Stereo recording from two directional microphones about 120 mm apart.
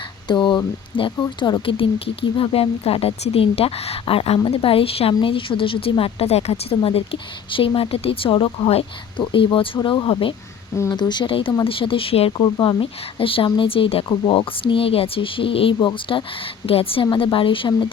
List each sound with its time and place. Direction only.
0.3 s speech: 40° left (ahead or behind)
2.4 s speech: 50° left (ahead or behind)
12.4 s speech: 40° left (ahead or behind)